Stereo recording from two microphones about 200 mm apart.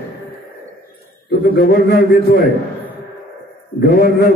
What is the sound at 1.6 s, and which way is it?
Speech, 45° left (ahead or behind).